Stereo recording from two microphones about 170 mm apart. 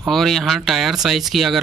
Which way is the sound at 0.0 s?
Centre (ahead or behind).